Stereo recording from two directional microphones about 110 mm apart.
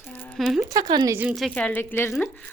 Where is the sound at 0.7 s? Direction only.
40° right (ahead or behind).